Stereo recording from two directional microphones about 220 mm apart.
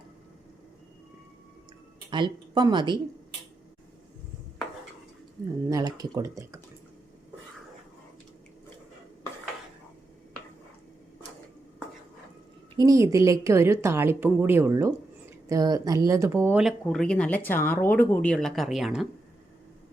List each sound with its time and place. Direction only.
2.0 s speech: 20° right (ahead or behind)
5.6 s speech: 15° right (ahead or behind)
12.7 s speech: 15° right (ahead or behind)